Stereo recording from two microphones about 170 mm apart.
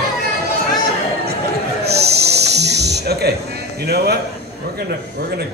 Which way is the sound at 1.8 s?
70° right (ahead or behind).